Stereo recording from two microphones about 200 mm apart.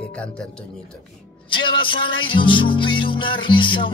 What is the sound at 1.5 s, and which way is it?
Music, 25° left (ahead or behind).